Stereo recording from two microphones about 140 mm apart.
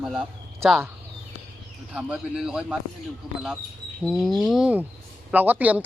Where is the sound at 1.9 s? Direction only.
5° right (ahead or behind).